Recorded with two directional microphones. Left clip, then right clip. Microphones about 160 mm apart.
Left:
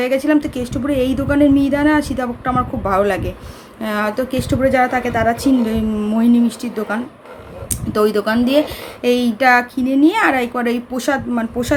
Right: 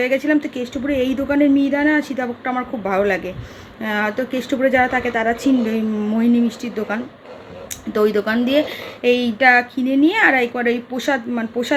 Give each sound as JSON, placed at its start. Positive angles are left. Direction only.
{"t": 0.0, "sound": "a woman's voice", "side_deg": 5}